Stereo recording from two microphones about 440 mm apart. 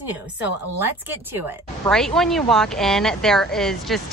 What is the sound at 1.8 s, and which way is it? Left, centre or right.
Speech, centre.